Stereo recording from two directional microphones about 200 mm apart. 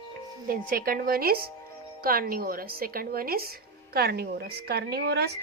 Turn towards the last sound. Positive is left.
turn(degrees=-55)  # may be behind; listen again after turning